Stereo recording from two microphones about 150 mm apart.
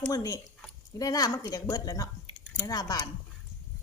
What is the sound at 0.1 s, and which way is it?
A woman's voice, 25° left (ahead or behind).